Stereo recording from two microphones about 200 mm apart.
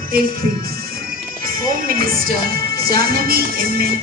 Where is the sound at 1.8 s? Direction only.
45° right (ahead or behind).